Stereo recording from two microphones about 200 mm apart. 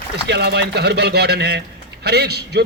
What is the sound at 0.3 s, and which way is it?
A man's voice, 60° right (ahead or behind).